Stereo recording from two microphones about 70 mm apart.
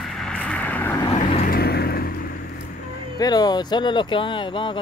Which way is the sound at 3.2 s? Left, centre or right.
Left.